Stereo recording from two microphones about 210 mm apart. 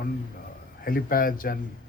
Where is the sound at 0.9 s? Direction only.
45° left (ahead or behind).